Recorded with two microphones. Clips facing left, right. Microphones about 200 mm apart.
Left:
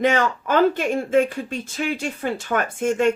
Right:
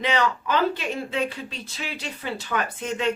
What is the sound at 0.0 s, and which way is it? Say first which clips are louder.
Speech: left 4 dB; 50° left (ahead or behind).